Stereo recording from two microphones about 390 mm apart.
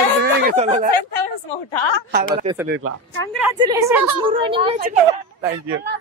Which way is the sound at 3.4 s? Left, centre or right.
Centre.